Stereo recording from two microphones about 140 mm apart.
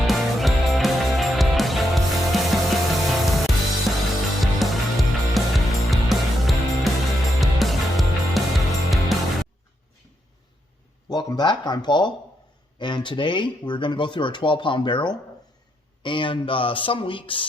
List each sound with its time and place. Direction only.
0.1 s music: centre (ahead or behind)
11.1 s speech: 30° left (ahead or behind)